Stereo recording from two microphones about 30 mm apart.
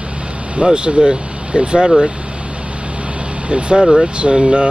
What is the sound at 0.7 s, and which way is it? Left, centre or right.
Speech, right.